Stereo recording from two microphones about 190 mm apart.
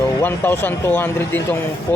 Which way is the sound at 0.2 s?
10° left (ahead or behind).